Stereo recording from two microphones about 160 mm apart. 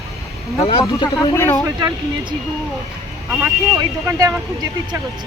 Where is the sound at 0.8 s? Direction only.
20° left (ahead or behind).